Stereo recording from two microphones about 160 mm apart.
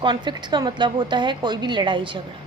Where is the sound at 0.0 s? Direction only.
30° right (ahead or behind).